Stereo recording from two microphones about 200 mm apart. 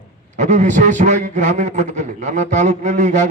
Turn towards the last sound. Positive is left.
turn(degrees=-35)  # may be behind; listen again after turning